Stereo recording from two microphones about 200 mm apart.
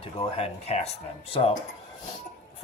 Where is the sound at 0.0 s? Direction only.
25° left (ahead or behind).